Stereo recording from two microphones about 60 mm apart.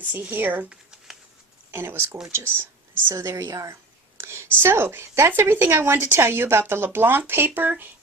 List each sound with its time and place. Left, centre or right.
0.0 s speech: right
0.7 s a sound: centre
1.7 s speech: right
3.3 s a woman's voice: right
4.2 s a sound: right
4.6 s speech: right